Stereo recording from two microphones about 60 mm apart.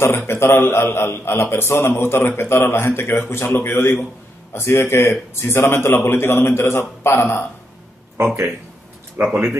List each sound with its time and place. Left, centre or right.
0.3 s a man's voice: left
9.2 s speech: right